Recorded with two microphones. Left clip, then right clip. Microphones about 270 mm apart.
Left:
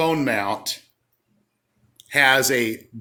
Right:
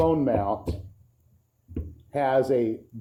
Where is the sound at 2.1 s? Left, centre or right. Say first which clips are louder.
Left 6 dB; left.